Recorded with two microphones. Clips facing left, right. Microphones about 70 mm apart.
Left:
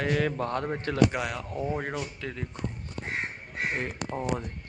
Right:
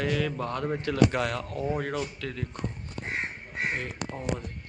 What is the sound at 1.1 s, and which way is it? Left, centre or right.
Speech, centre.